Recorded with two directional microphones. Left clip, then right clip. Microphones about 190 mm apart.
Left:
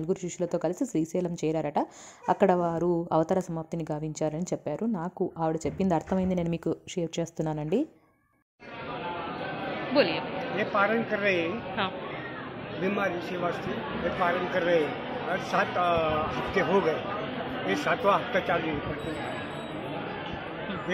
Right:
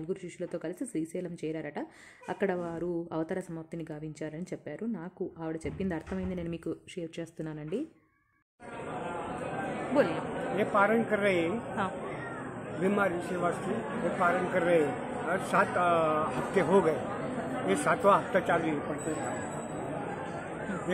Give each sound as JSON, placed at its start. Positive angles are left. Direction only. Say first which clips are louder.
{"t": 0.1, "sound": "speech", "louder": "left 8 dB", "side_deg": 25}
{"t": 9.9, "sound": "a woman's voice", "louder": "left 3 dB", "side_deg": -15}